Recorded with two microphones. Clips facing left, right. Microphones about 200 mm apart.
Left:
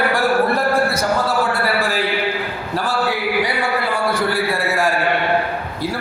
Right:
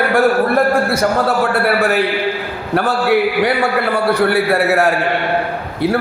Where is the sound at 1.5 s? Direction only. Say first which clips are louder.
Right 5 dB; 65° right (ahead or behind).